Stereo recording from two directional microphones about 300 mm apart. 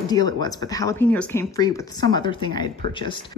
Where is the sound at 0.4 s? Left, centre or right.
Centre.